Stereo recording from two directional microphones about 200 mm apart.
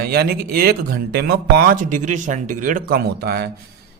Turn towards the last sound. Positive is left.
turn(degrees=-55)  # may be behind; listen again after turning